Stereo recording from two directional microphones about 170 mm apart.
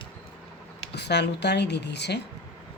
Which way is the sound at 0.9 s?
85° left.